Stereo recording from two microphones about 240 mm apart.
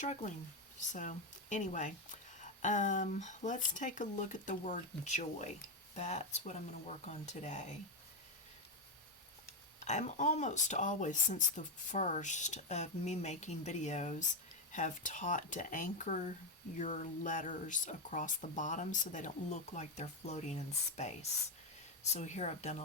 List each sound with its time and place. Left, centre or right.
0.0 s speech: left
9.8 s speech: left